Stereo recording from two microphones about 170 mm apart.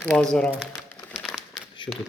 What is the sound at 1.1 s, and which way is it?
Crumpling, centre (ahead or behind).